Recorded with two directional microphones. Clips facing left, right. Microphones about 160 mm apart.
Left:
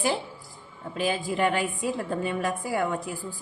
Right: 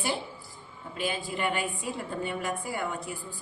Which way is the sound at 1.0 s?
90° left.